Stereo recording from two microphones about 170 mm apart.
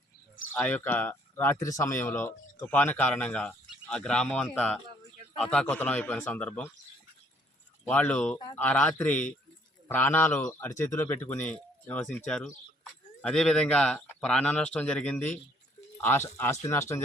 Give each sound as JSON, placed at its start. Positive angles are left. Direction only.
{"t": 0.5, "sound": "a man's voice", "side_deg": 10}
{"t": 7.9, "sound": "a man's voice", "side_deg": 5}